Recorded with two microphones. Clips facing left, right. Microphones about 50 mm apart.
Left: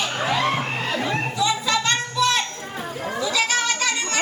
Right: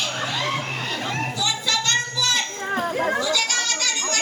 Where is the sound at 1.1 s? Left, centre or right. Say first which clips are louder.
Left 3 dB; left.